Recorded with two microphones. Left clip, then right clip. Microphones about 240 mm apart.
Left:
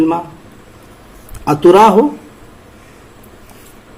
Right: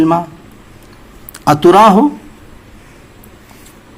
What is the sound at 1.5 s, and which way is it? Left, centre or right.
Speech, right.